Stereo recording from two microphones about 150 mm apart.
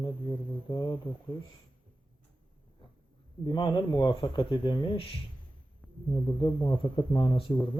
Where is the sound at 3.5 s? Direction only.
30° left (ahead or behind).